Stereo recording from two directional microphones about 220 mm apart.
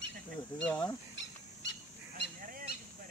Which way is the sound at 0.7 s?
10° left (ahead or behind).